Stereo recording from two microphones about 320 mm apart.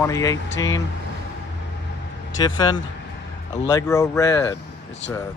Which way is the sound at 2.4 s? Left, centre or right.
Centre.